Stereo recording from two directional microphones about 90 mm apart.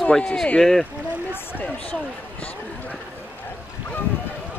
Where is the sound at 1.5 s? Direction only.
15° left (ahead or behind).